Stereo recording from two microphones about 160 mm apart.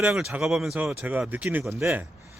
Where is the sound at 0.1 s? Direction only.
5° right (ahead or behind).